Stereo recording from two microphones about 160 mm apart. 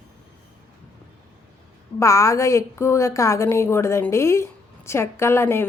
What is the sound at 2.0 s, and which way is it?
A woman's voice, 20° left (ahead or behind).